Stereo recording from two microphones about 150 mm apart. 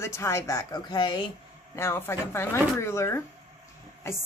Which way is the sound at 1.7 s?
15° left (ahead or behind).